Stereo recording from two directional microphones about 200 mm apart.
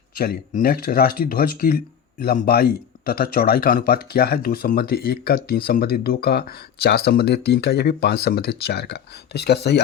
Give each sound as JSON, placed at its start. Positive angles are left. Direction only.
{"t": 0.2, "sound": "speech", "side_deg": 50}